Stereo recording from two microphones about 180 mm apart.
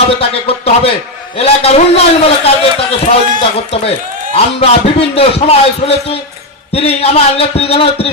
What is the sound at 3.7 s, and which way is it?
A man's voice, 35° left (ahead or behind).